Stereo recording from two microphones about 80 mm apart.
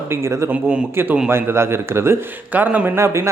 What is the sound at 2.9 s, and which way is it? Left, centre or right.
Speech, right.